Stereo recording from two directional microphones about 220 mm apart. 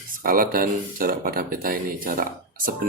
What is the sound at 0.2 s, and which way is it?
Speech, 40° right (ahead or behind).